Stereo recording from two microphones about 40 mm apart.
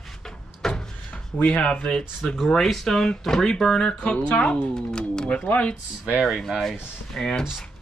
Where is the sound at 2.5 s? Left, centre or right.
Centre.